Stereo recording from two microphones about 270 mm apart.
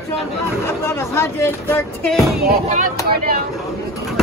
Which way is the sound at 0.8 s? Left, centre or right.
Centre.